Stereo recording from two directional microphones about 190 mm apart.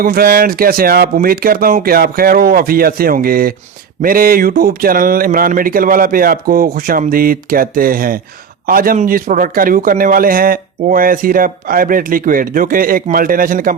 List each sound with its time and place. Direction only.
0.0 s a man's voice: 50° right (ahead or behind)